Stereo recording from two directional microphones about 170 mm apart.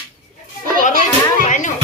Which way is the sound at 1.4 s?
45° left (ahead or behind).